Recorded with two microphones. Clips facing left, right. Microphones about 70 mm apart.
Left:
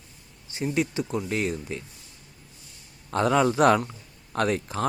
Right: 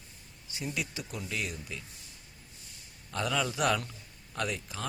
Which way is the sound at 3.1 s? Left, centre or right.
Left.